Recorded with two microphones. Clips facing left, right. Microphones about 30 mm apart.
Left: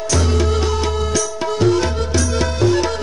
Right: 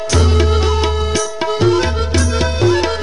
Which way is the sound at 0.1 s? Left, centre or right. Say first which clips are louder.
Right 3 dB; right.